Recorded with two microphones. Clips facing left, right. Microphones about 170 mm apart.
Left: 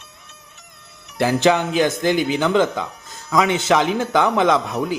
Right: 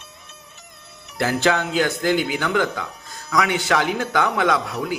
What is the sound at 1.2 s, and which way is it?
Speech, 20° left (ahead or behind).